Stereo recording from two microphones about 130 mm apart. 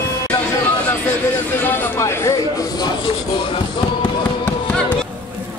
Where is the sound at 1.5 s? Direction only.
15° left (ahead or behind); by 4.1 s 40° left (ahead or behind).